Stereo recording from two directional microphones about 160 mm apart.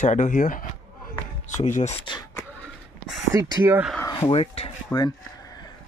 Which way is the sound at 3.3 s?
20° right (ahead or behind).